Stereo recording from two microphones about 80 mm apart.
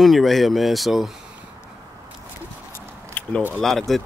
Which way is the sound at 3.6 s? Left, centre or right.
Centre.